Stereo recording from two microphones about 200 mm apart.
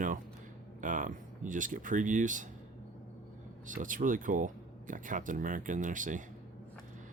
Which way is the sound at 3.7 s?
40° right (ahead or behind).